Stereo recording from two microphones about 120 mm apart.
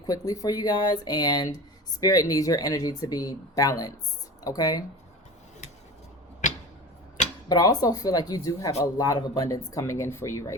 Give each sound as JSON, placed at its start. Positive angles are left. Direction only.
{"t": 0.0, "sound": "speech", "side_deg": 30}
{"t": 6.4, "sound": "a sound", "side_deg": 90}
{"t": 7.4, "sound": "speech", "side_deg": 35}